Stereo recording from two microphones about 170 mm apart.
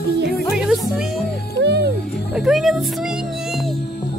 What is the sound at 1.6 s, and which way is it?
Music, 80° right.